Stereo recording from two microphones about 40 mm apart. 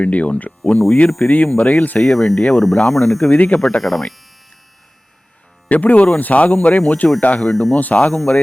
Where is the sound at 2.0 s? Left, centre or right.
Centre.